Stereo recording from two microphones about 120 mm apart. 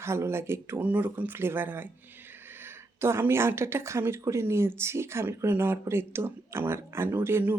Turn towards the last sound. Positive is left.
turn(degrees=-20)  # may be behind; listen again after turning